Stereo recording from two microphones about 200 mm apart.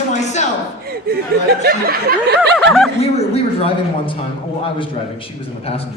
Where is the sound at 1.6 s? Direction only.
50° right (ahead or behind).